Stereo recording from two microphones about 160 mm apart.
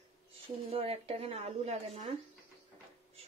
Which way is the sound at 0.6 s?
35° right (ahead or behind).